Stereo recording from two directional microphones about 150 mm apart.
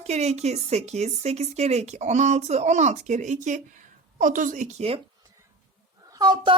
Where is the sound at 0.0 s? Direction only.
45° right (ahead or behind).